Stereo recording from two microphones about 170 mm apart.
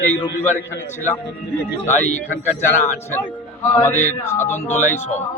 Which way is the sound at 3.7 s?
15° left (ahead or behind).